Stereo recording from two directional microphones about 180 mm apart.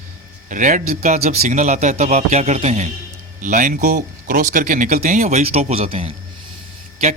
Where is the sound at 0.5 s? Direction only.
45° right (ahead or behind).